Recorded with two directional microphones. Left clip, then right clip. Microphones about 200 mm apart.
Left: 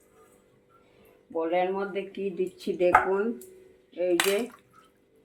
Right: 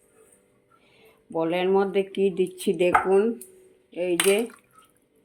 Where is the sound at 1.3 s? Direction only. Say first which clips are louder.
Right 4 dB; 55° right (ahead or behind).